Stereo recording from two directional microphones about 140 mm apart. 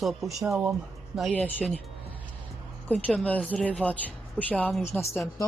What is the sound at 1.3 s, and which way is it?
Speech, 10° left (ahead or behind).